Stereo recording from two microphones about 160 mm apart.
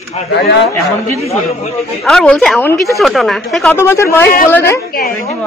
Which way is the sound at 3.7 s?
15° left (ahead or behind).